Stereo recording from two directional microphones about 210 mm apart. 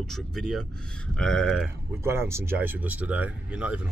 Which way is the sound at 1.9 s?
10° right (ahead or behind).